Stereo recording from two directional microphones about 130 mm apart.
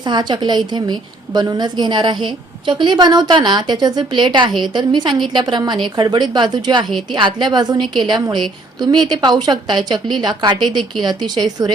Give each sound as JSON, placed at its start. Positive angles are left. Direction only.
{"t": 0.0, "sound": "a woman's voice", "side_deg": -35}